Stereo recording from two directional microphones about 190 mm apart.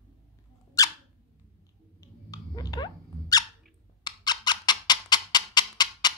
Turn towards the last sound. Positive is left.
turn(degrees=20)  # may be behind; listen again after turning